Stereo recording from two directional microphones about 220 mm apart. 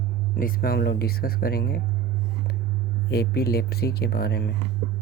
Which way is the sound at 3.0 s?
45° left (ahead or behind).